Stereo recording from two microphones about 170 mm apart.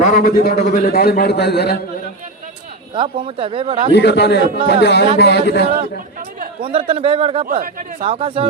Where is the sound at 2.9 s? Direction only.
30° right (ahead or behind).